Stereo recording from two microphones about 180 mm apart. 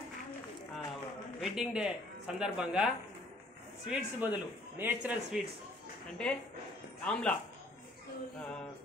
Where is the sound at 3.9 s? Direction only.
10° right (ahead or behind).